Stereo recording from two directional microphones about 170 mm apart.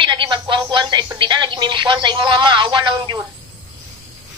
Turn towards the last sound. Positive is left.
turn(degrees=-30)  # may be behind; listen again after turning